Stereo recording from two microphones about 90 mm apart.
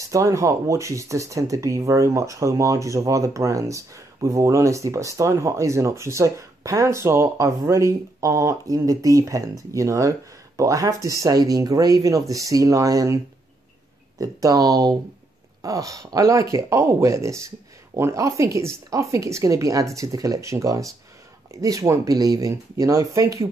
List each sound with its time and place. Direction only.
0.1 s speech: 35° right (ahead or behind)